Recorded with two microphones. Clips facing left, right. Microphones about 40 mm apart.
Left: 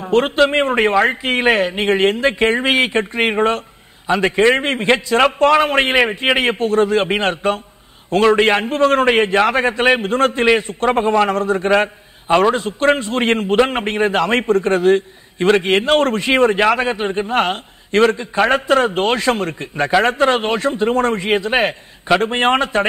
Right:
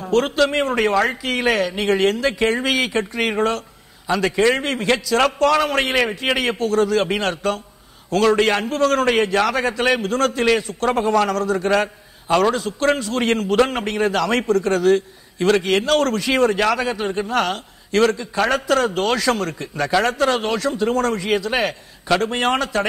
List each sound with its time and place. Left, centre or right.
0.0 s a man's voice: left